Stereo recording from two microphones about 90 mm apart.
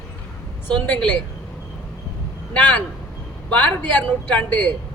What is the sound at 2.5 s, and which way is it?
A woman's voice, 20° left (ahead or behind).